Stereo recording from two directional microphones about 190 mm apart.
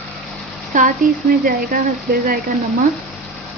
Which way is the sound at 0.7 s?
40° right (ahead or behind).